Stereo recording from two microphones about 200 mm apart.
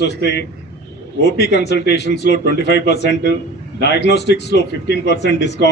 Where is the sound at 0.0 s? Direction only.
55° left (ahead or behind).